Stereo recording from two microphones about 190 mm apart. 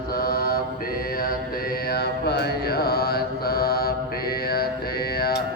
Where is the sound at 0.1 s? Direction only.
50° left (ahead or behind).